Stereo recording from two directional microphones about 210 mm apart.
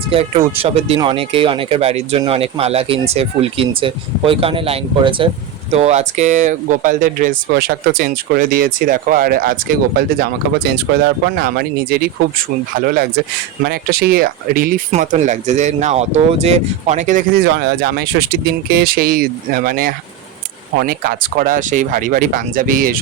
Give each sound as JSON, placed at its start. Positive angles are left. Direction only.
{"t": 0.1, "sound": "speech", "side_deg": -25}
{"t": 17.4, "sound": "speech", "side_deg": -50}